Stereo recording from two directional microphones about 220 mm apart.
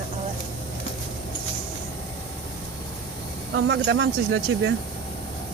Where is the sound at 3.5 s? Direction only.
55° right (ahead or behind).